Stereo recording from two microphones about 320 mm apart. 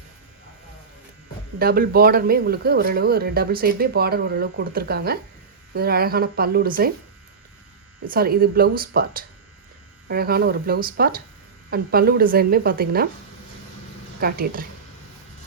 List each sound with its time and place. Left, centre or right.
1.5 s speech: right
8.0 s speech: right
14.2 s speech: right